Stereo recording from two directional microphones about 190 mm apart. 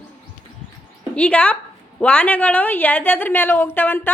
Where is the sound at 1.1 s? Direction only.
5° left (ahead or behind).